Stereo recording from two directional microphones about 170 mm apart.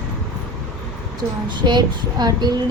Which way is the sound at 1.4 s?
25° right (ahead or behind).